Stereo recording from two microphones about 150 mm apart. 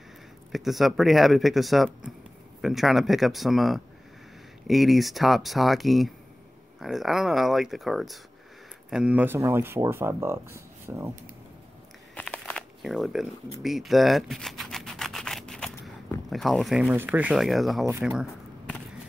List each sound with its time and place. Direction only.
0.5 s speech: centre (ahead or behind); by 11.1 s 15° right (ahead or behind)
12.2 s crumpling: 10° left (ahead or behind)
16.3 s speech: centre (ahead or behind)
16.9 s speech: 10° right (ahead or behind)